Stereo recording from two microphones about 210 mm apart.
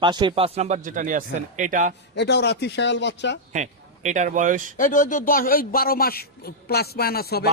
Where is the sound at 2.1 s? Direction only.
55° left (ahead or behind).